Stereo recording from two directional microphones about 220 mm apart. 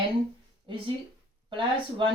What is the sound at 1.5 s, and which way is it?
Speech, 25° right (ahead or behind).